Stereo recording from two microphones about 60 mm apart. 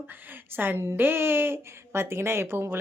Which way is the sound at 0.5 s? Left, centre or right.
Right.